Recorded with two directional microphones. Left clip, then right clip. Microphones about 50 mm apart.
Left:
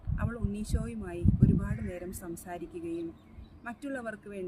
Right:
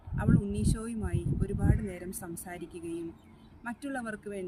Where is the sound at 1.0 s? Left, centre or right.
Left.